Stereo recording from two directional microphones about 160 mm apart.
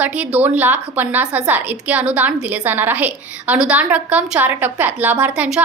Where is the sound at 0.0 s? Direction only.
10° right (ahead or behind).